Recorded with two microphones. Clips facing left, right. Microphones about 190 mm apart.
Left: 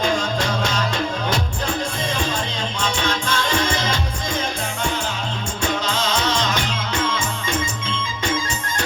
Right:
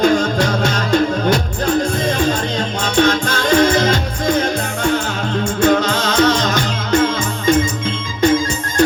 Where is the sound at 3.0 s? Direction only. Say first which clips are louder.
Right 12 dB; 50° right (ahead or behind).